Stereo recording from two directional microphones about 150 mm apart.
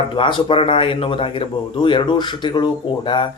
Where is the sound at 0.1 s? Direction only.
35° left (ahead or behind).